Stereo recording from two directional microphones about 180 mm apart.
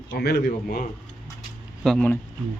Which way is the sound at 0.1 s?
60° left (ahead or behind).